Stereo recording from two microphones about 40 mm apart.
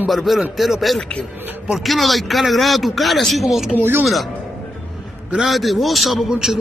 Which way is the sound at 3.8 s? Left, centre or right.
Right.